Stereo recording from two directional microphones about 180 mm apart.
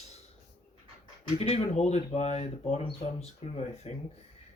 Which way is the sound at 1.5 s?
35° left (ahead or behind).